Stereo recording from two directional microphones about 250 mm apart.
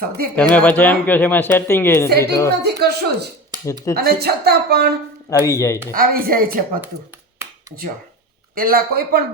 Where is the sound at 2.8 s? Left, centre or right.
Right.